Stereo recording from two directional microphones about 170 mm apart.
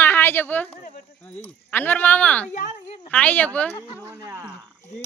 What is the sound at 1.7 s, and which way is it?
Speech, 10° left (ahead or behind).